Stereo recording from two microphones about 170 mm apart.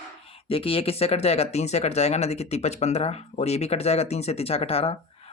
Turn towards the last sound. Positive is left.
turn(degrees=35)  # may be behind; listen again after turning